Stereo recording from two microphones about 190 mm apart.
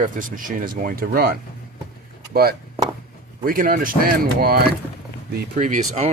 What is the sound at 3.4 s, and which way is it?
Speech, 45° right (ahead or behind).